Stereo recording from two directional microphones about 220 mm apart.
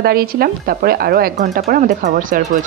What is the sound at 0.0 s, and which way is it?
Speech, 45° right (ahead or behind).